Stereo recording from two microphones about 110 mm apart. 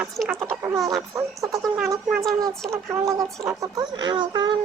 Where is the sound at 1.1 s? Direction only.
30° right (ahead or behind).